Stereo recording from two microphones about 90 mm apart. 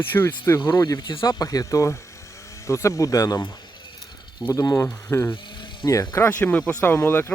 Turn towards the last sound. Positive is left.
turn(degrees=25)  # may be behind; listen again after turning